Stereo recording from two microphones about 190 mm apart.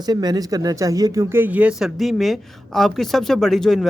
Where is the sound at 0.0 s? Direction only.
20° right (ahead or behind).